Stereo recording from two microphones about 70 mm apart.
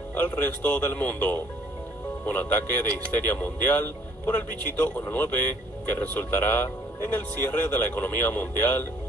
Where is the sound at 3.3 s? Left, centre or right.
Left.